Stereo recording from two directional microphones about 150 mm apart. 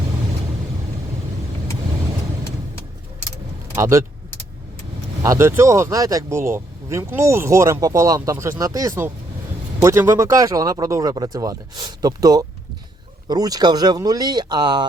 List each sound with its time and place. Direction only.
3.8 s speech: 20° right (ahead or behind)
5.2 s speech: 20° right (ahead or behind)